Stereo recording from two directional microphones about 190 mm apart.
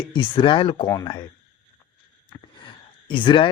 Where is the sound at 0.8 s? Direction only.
15° left (ahead or behind).